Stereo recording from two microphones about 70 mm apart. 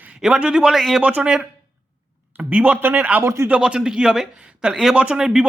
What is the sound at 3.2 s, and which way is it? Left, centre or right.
Speech, right.